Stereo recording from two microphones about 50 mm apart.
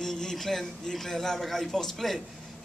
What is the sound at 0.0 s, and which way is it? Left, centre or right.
A man's voice, centre.